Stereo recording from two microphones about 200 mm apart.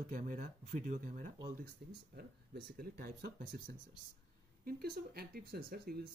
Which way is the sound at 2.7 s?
50° right (ahead or behind).